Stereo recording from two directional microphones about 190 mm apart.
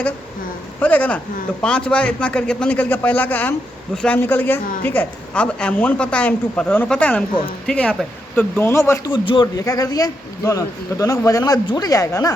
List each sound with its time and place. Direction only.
0.8 s a man's voice: 10° left (ahead or behind)
9.1 s speech: 25° left (ahead or behind)